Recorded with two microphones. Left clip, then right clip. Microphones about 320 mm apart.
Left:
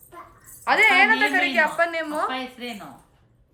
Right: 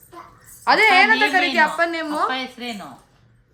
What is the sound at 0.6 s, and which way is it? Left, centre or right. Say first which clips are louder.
Speech: right 3 dB; centre.